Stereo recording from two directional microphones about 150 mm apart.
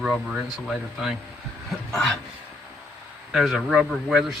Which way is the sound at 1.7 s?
Centre (ahead or behind).